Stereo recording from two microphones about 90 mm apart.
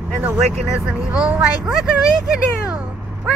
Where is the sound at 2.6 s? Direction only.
10° right (ahead or behind).